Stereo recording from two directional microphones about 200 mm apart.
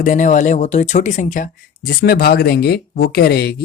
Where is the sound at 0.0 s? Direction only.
40° left (ahead or behind).